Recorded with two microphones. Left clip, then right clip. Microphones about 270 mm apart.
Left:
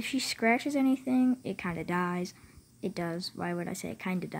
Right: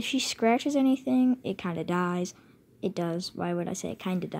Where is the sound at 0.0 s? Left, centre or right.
Centre.